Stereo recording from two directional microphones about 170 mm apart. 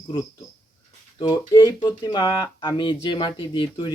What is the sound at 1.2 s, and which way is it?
Speech, 25° left (ahead or behind).